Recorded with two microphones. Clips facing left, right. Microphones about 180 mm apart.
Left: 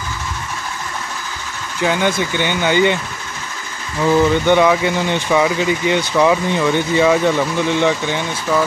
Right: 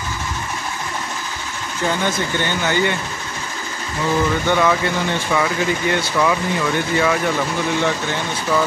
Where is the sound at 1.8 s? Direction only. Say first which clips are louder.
Left 4 dB; 15° left (ahead or behind).